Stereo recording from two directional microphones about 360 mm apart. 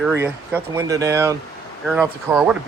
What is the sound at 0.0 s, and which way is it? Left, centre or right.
Speech, centre.